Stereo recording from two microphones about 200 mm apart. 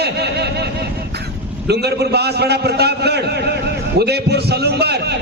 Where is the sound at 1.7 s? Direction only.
55° right (ahead or behind).